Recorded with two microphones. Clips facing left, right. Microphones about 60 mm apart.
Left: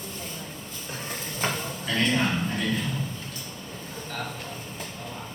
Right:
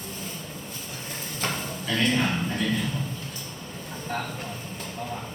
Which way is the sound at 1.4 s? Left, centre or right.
Centre.